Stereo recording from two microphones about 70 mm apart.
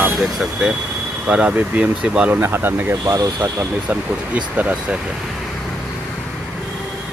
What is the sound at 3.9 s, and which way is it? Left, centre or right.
Speech, right.